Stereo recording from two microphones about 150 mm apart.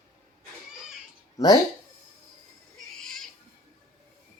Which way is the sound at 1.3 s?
25° left (ahead or behind).